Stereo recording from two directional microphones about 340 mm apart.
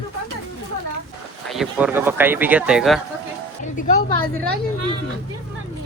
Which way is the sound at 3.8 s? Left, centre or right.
Centre.